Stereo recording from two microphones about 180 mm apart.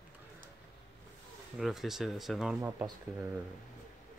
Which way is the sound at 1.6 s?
Centre (ahead or behind).